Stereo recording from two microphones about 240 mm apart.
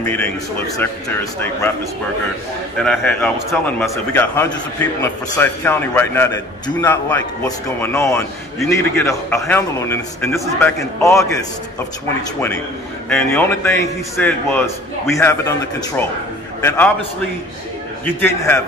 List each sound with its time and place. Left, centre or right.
0.0 s a man's voice: centre
2.8 s a man's voice: centre
16.6 s a man's voice: centre
18.2 s a man's voice: centre